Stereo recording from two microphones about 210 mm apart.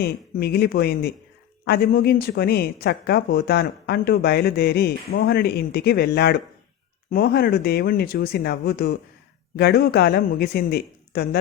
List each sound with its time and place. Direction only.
0.0 s speech: 50° left (ahead or behind)